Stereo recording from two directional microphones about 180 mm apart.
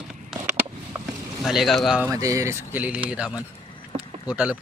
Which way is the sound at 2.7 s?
10° right (ahead or behind).